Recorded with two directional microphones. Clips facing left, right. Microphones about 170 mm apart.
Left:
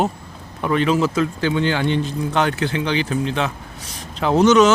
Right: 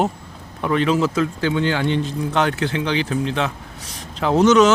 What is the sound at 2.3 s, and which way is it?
Speech, 10° left (ahead or behind).